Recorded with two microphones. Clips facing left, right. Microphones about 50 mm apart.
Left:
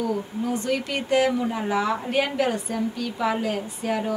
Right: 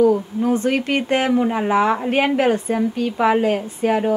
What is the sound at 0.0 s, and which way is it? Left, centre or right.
Speech, right.